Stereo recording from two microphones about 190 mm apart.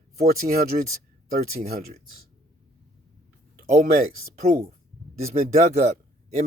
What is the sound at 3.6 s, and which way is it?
Speech, 50° right (ahead or behind).